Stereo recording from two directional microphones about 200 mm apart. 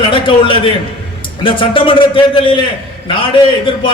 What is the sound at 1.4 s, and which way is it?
A man's voice, 25° left (ahead or behind).